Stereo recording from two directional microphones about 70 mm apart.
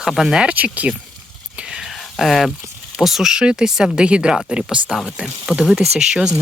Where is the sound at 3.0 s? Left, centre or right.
Centre.